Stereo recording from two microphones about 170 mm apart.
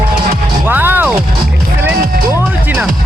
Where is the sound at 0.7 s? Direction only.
10° right (ahead or behind).